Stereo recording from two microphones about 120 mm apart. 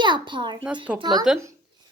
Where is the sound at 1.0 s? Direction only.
35° right (ahead or behind).